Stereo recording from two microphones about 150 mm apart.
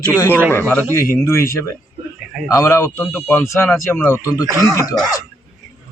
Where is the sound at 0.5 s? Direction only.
10° left (ahead or behind).